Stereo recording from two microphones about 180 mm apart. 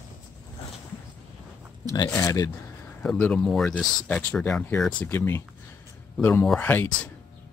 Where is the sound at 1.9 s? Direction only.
20° left (ahead or behind).